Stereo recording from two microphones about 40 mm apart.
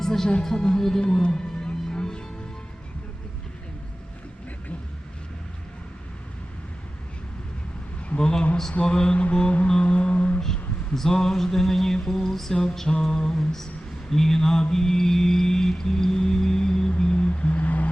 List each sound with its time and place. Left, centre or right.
0.0 s speech: centre
0.4 s mantra: centre
1.2 s music: centre
8.2 s mantra: left
9.3 s music: left
9.8 s mantra: left
10.4 s a sound: centre
12.0 s mantra: centre
17.0 s music: left
17.6 s vehicle: left